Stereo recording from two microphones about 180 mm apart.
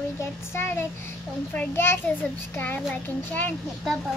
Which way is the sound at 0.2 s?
15° left (ahead or behind).